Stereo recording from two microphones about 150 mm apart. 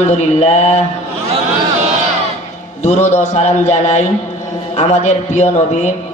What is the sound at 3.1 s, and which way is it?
A man's voice, 50° left (ahead or behind).